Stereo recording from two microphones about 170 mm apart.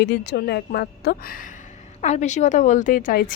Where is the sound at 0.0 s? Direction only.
85° left; by 1.4 s 65° left (ahead or behind).